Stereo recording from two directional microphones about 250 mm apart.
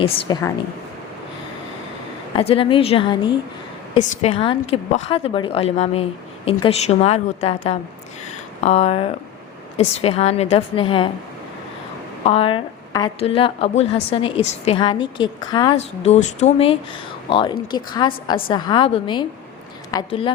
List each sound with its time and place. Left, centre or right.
0.0 s a woman's voice: centre
2.3 s a woman's voice: left
12.2 s a woman's voice: left